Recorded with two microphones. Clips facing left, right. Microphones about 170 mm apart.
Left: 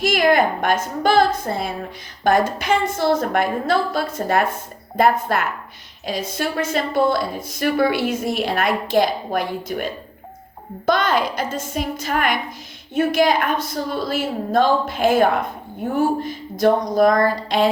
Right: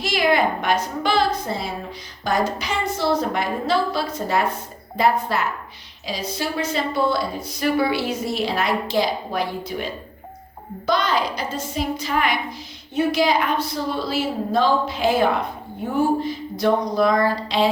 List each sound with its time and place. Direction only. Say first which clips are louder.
0.0 s a woman's voice: left 3 dB; 50° left (ahead or behind)